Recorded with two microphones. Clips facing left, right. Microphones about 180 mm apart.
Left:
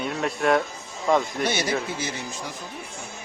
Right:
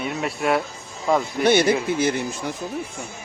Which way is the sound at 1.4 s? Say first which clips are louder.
Right 9 dB; 55° right (ahead or behind).